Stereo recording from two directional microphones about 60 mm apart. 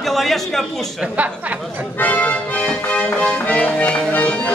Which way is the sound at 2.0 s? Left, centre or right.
Left.